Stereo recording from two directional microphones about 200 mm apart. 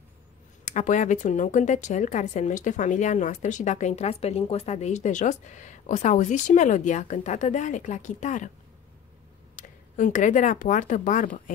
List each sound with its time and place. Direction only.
0.7 s a woman's voice: 40° left (ahead or behind)
9.6 s speech: 40° left (ahead or behind)